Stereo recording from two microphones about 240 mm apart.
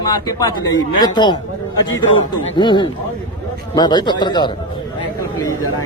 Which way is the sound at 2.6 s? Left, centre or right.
Centre.